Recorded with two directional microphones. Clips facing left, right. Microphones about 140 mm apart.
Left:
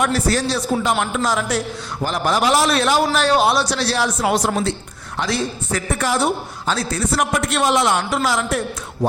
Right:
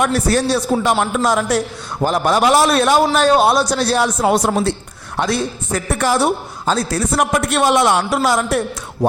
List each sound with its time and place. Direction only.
0.1 s a woman's voice: 55° right (ahead or behind)
6.7 s a woman's voice: 40° right (ahead or behind)
7.5 s speech: 55° right (ahead or behind)